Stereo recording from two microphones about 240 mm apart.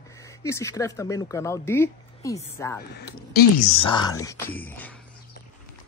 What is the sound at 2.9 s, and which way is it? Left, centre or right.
Speech, left.